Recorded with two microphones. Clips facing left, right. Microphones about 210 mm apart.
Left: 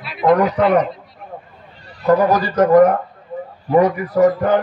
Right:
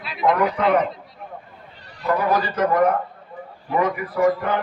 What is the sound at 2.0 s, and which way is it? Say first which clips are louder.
A man's voice: left 6 dB; 40° left (ahead or behind).